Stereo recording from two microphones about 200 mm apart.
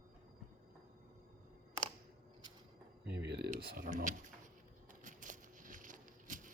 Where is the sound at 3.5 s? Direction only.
40° right (ahead or behind).